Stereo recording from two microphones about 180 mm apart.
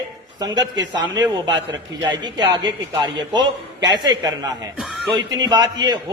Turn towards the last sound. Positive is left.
turn(degrees=-20)  # may be behind; listen again after turning